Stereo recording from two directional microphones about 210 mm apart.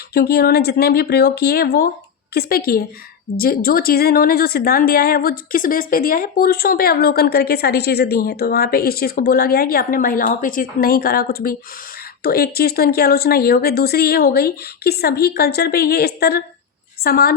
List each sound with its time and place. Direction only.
0.1 s speech: 50° left (ahead or behind)